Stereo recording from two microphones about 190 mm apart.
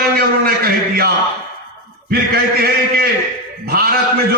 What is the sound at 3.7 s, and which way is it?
Speech, 55° right (ahead or behind).